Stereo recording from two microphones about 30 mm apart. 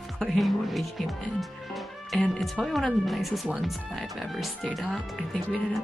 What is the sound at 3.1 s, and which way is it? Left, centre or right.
Speech, centre.